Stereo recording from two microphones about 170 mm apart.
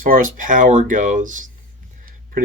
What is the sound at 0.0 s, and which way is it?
Speech, 55° right (ahead or behind).